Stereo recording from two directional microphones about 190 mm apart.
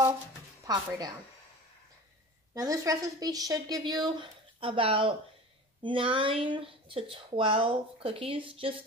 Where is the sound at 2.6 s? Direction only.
20° right (ahead or behind).